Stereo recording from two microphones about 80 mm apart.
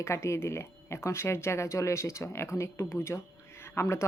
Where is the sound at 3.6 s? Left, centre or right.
Left.